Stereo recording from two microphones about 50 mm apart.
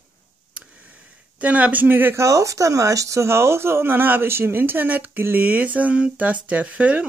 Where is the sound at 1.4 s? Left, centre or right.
Right.